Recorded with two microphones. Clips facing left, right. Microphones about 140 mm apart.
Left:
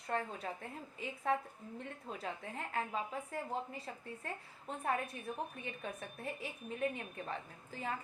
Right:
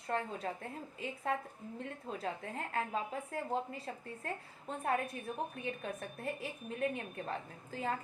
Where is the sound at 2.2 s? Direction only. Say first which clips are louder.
Right 3 dB; 40° right (ahead or behind).